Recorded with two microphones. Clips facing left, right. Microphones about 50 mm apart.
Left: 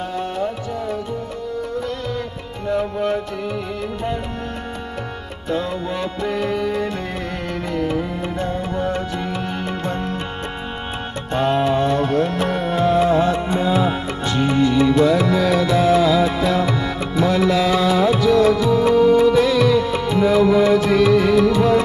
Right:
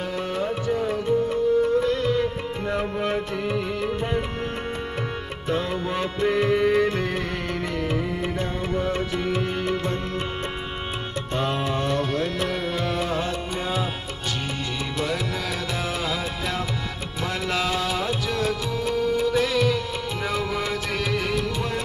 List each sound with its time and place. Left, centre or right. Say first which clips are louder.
2.7 s music: left 6 dB; right
5.5 s music: left 3 dB; centre
8.9 s music: left 1 dB; centre
9.7 s music: left 2 dB; centre
11.5 s music: left 8 dB; left
12.0 s music: left 6 dB; centre
13.3 s music: left 9 dB; left
13.7 s music: left 9 dB; left